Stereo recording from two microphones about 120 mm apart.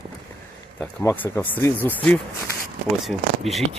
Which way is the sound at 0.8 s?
20° left (ahead or behind).